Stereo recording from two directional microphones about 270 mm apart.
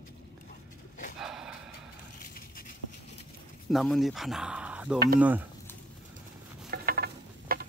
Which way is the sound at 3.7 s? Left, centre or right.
Centre.